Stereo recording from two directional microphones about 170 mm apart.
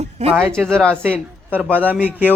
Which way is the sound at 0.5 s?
5° left (ahead or behind).